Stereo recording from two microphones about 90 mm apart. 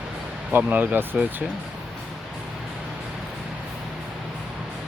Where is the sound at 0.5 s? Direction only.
20° right (ahead or behind).